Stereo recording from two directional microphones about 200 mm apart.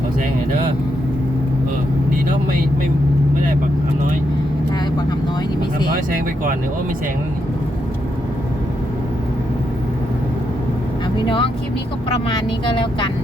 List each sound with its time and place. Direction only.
11.3 s speech: 25° left (ahead or behind)